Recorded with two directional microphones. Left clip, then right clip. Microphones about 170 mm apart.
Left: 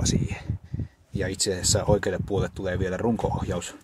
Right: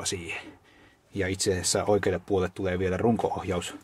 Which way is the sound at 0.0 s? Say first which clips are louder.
Left 3 dB; 15° right (ahead or behind).